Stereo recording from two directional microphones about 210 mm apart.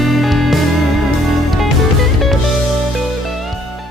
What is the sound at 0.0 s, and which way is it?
Music, centre (ahead or behind).